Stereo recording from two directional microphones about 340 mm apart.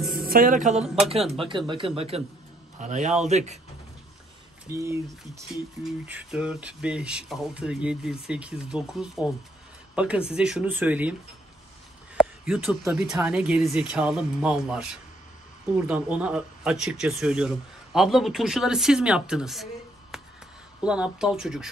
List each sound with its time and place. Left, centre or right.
0.1 s a sound: right
0.7 s speech: centre
1.5 s a man's voice: centre
4.7 s speech: centre
12.2 s speech: centre